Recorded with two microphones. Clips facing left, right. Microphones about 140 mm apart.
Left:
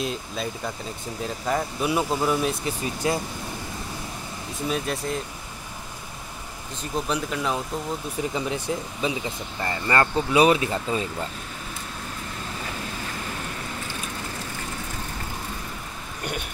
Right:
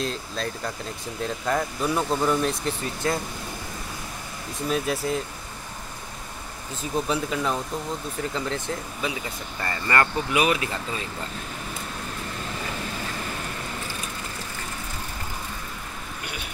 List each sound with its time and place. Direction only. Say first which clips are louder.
0.0 s speech: even; 5° left (ahead or behind)
4.6 s speech: right 2 dB; centre (ahead or behind)
6.8 s speech: right 1 dB; 5° right (ahead or behind)
8.2 s speech: left 2 dB; 15° left (ahead or behind)